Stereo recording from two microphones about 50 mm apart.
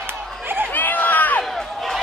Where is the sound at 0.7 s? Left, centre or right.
Left.